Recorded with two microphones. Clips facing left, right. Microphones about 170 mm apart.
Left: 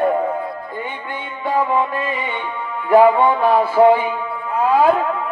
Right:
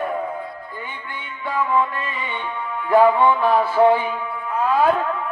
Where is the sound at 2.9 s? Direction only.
15° left (ahead or behind).